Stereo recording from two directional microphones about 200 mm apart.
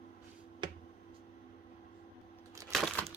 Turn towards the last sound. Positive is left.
turn(degrees=0)  # may be behind; listen again after turning